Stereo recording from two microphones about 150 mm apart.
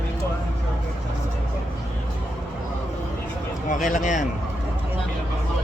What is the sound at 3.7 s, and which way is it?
Speech, 60° left (ahead or behind).